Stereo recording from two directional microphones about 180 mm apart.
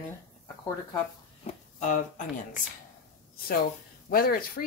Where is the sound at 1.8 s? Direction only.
45° left (ahead or behind).